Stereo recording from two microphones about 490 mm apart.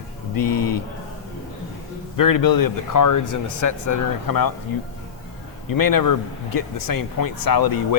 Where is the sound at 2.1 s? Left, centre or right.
Left.